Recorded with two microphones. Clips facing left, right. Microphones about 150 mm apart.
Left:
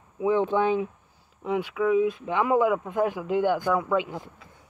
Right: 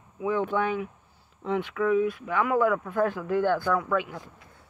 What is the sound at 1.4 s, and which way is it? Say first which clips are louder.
Speech: left 1 dB; 10° left (ahead or behind).